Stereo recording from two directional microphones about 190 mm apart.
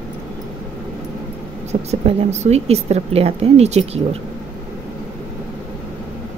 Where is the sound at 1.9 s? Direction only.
35° right (ahead or behind).